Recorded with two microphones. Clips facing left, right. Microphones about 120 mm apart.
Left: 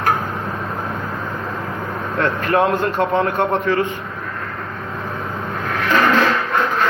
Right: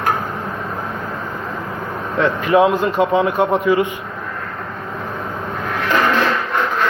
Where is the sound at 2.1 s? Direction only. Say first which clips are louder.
Right 3 dB; 5° right (ahead or behind).